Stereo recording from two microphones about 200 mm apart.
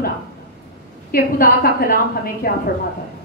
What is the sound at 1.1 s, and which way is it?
A woman's voice, 45° left (ahead or behind).